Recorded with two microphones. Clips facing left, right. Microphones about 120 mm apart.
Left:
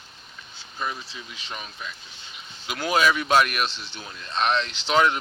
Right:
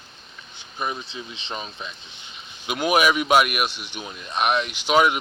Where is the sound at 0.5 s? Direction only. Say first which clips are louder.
Right 2 dB; 20° right (ahead or behind).